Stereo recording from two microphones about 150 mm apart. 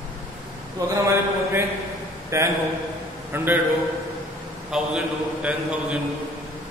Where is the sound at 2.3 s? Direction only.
20° right (ahead or behind).